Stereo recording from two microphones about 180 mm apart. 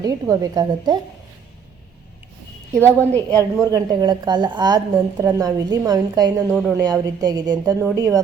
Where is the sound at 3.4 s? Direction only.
20° right (ahead or behind).